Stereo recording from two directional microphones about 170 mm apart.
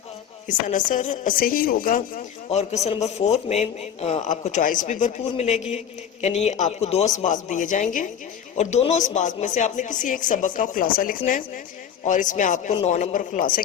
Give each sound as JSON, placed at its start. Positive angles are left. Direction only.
{"t": 0.7, "sound": "speech", "side_deg": 50}
{"t": 2.5, "sound": "a man's voice", "side_deg": 40}